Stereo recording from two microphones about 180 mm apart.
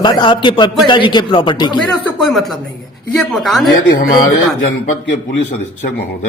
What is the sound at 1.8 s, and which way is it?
Speech, centre (ahead or behind).